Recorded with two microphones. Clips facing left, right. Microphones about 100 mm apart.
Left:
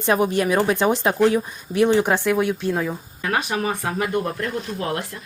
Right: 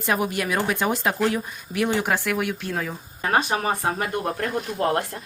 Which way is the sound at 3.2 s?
35° right (ahead or behind).